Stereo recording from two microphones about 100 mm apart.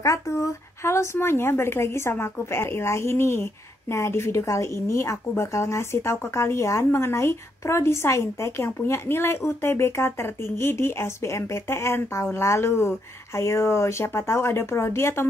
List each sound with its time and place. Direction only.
0.0 s a woman's voice: 30° left (ahead or behind)